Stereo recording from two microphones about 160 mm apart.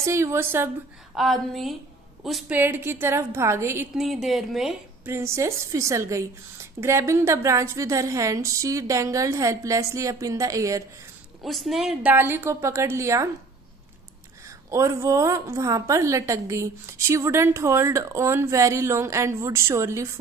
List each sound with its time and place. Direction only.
0.0 s a woman's voice: 15° right (ahead or behind)
1.1 s speech: centre (ahead or behind)
2.5 s a woman's voice: 15° right (ahead or behind)
3.9 s speech: centre (ahead or behind)
5.0 s a woman's voice: 15° right (ahead or behind)
11.4 s a woman's voice: centre (ahead or behind); by 13.3 s 20° right (ahead or behind)
14.4 s a woman's voice: 20° right (ahead or behind)